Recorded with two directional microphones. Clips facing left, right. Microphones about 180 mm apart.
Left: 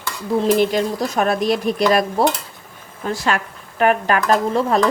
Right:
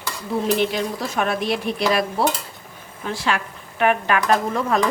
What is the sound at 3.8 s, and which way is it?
Dishes, 40° left (ahead or behind).